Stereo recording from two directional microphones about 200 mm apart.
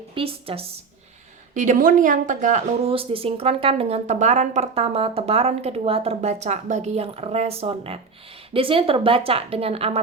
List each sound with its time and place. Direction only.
0.1 s a woman's voice: 30° right (ahead or behind)
1.5 s a woman's voice: 40° right (ahead or behind)